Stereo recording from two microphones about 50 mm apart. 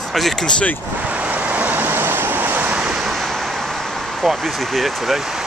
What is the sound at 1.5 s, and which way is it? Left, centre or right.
Vehicle, right.